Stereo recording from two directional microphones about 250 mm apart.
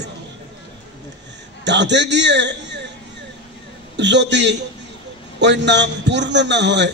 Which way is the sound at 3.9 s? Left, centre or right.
Right.